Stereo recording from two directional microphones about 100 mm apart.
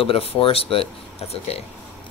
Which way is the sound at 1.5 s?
90° left.